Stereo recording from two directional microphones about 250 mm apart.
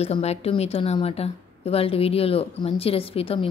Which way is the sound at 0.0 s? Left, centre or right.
Left.